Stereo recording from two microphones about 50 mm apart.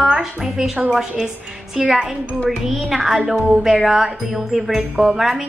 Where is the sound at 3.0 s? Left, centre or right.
Centre.